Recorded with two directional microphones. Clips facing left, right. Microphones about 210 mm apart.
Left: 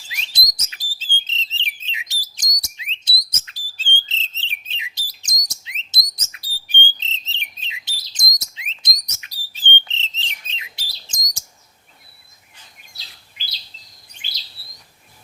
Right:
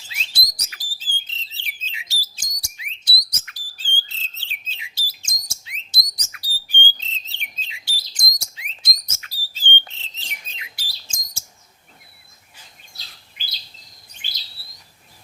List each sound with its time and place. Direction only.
0.3 s bird: 20° left (ahead or behind)